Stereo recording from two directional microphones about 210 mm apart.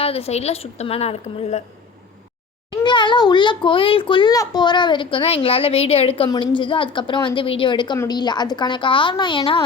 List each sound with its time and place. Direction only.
0.0 s a child's voice: 30° left (ahead or behind)
2.6 s a child's voice: 20° left (ahead or behind)